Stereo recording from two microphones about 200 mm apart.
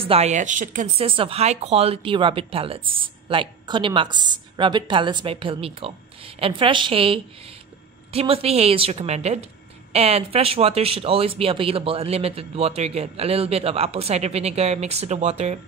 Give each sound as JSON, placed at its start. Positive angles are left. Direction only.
{"t": 0.0, "sound": "speech", "side_deg": -30}